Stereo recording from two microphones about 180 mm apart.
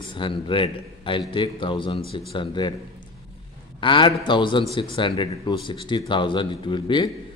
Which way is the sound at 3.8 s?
25° left (ahead or behind).